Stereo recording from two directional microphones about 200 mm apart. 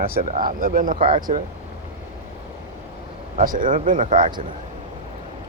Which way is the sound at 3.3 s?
40° right (ahead or behind).